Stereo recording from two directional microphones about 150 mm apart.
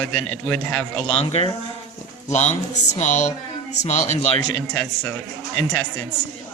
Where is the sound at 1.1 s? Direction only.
40° left (ahead or behind).